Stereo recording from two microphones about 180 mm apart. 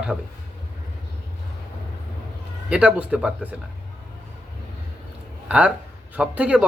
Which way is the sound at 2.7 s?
5° right (ahead or behind).